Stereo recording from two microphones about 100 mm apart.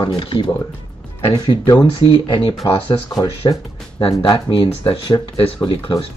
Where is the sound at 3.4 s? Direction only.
45° left (ahead or behind).